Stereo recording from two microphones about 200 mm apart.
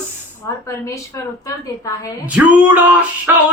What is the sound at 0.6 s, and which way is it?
Speech, 15° left (ahead or behind).